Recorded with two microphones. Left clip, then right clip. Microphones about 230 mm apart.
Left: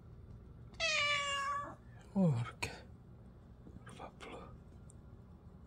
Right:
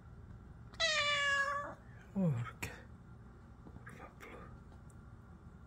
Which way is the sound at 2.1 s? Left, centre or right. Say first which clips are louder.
Left 3 dB; centre.